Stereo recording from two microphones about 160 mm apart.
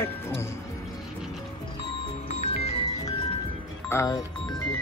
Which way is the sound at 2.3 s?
40° left (ahead or behind).